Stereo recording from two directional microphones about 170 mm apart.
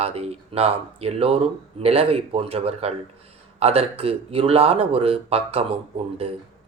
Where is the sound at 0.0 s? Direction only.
35° right (ahead or behind).